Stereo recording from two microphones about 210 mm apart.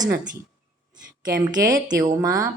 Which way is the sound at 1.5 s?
15° right (ahead or behind).